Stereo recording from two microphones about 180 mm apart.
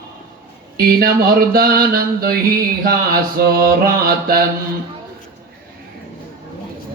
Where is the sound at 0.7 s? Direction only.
55° right (ahead or behind).